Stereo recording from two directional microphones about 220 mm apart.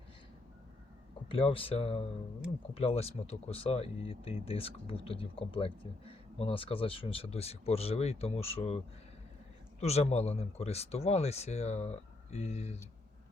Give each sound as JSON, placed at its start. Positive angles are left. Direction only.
{"t": 1.3, "sound": "speech", "side_deg": 25}
{"t": 9.8, "sound": "speech", "side_deg": 30}